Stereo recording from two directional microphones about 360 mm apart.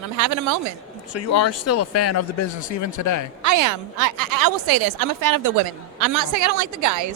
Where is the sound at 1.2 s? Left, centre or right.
Left.